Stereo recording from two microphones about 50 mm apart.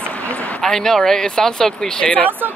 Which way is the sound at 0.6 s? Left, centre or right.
Centre.